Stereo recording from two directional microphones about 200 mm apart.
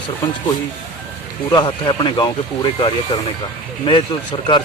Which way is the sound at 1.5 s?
20° left (ahead or behind).